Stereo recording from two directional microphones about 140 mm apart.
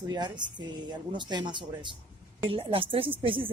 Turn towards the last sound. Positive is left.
turn(degrees=-40)  # may be behind; listen again after turning